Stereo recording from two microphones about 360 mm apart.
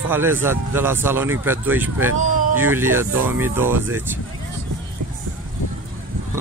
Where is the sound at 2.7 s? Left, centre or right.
Centre.